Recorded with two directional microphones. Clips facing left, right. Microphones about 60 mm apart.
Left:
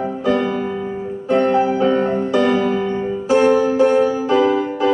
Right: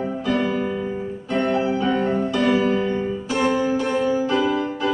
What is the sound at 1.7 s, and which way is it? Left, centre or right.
Music, left.